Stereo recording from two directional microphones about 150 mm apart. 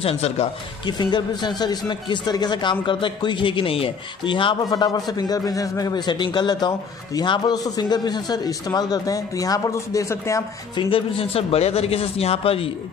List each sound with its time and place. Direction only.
0.0 s speech: 40° left (ahead or behind)
0.8 s a man's voice: 30° left (ahead or behind)
10.8 s a man's voice: 35° left (ahead or behind)